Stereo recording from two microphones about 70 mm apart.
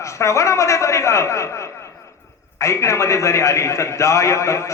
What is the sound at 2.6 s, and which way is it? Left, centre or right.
A man's voice, left.